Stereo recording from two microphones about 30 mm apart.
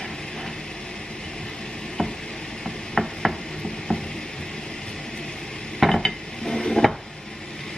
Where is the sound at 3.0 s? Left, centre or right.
Centre.